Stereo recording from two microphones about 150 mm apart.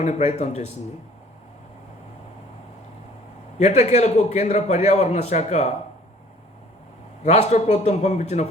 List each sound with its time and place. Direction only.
0.0 s a man's voice: 50° left (ahead or behind)
3.6 s a man's voice: 50° left (ahead or behind)
7.3 s a man's voice: 50° left (ahead or behind)